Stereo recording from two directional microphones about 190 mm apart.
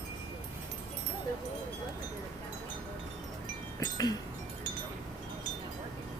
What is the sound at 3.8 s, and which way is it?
Wind chime, 20° left (ahead or behind).